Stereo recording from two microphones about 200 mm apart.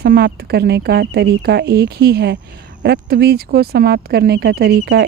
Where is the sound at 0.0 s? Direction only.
50° right (ahead or behind).